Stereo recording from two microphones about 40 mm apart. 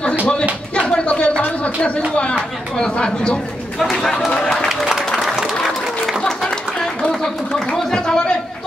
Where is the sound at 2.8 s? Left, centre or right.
Left.